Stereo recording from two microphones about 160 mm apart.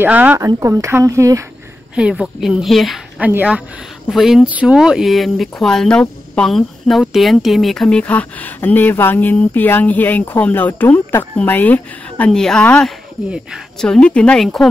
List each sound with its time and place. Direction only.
0.0 s speech: 10° right (ahead or behind)
2.0 s a woman's voice: 5° right (ahead or behind)